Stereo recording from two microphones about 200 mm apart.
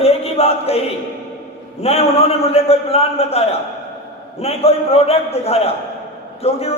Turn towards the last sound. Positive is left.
turn(degrees=30)  # may be behind; listen again after turning